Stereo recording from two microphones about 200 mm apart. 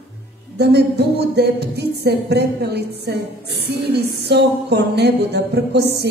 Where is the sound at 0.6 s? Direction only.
55° right (ahead or behind).